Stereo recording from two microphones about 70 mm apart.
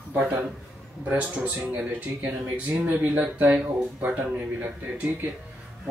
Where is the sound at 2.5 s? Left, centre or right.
Right.